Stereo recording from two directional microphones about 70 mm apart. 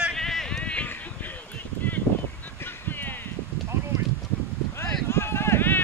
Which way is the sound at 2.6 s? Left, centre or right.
Left.